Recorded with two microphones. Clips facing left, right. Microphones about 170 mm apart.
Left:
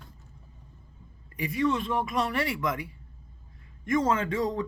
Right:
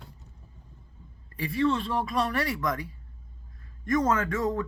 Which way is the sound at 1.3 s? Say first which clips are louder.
Right 1 dB; 20° left (ahead or behind).